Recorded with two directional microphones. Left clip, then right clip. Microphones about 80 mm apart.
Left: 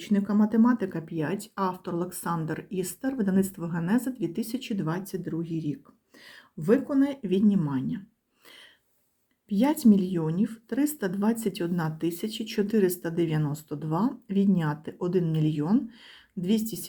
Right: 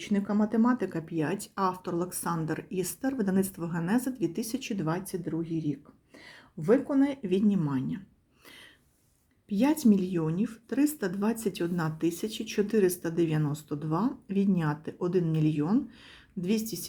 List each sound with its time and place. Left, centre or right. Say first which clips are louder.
0.0 s speech: left 3 dB; left
7.2 s speech: left 2 dB; left
9.5 s speech: left 2 dB; left